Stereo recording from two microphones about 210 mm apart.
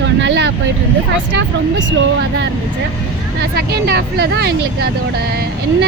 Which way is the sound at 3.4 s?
50° right (ahead or behind).